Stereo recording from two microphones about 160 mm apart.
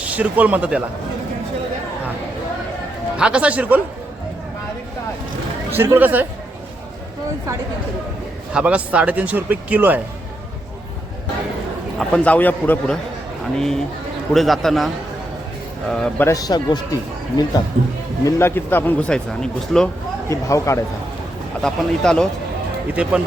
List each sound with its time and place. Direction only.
0.0 s speech: 10° right (ahead or behind)
3.2 s speech: 5° right (ahead or behind)
5.7 s speech: 15° right (ahead or behind)
8.5 s speech: 10° right (ahead or behind)
11.9 s a man's voice: 5° left (ahead or behind)
15.9 s a man's voice: 5° left (ahead or behind)
20.2 s a man's voice: 20° left (ahead or behind)
21.6 s speech: 5° left (ahead or behind)